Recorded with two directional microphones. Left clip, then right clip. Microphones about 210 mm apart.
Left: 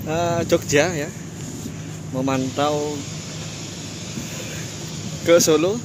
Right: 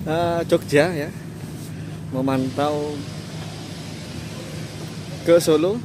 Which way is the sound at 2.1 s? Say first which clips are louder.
Even; 5° right (ahead or behind).